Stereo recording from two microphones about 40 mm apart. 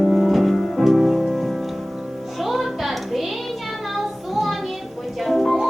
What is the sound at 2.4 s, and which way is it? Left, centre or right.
Music, centre.